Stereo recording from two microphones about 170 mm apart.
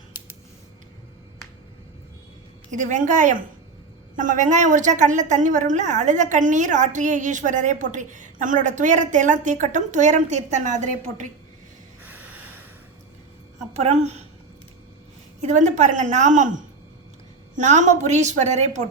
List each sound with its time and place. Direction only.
2.6 s a woman's voice: 45° right (ahead or behind)
13.7 s a woman's voice: 40° right (ahead or behind)
15.4 s a woman's voice: 45° right (ahead or behind)
17.6 s a woman's voice: 45° right (ahead or behind)